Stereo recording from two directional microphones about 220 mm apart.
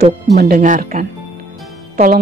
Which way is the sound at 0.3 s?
40° right (ahead or behind).